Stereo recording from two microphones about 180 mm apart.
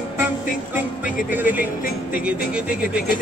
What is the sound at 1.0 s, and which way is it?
Speech, 10° right (ahead or behind).